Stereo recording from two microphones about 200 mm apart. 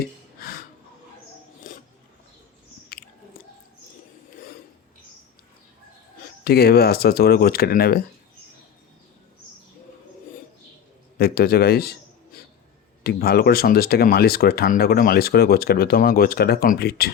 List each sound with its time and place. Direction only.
1.7 s a sound: 45° left (ahead or behind)
2.9 s biting: 50° left (ahead or behind)
6.4 s speech: 50° left (ahead or behind)
11.2 s speech: 50° left (ahead or behind)
13.0 s speech: 50° left (ahead or behind)